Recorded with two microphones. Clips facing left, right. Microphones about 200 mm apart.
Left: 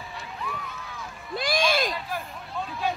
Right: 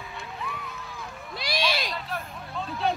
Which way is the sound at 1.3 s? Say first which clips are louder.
Left 4 dB; 50° left (ahead or behind).